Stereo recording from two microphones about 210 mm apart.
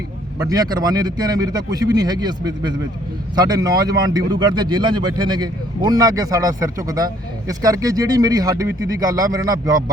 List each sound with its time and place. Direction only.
0.3 s speech: 15° right (ahead or behind)